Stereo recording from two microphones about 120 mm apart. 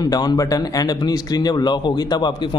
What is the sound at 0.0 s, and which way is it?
Speech, 35° left (ahead or behind).